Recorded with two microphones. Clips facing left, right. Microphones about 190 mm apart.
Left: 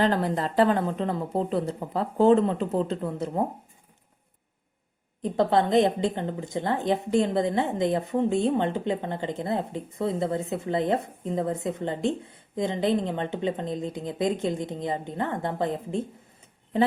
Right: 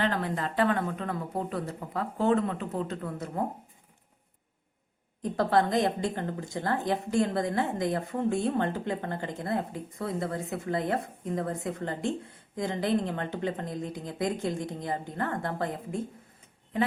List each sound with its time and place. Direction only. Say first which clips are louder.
0.0 s a woman's voice: left 5 dB; 35° left (ahead or behind)
5.2 s a woman's voice: left 3 dB; 20° left (ahead or behind)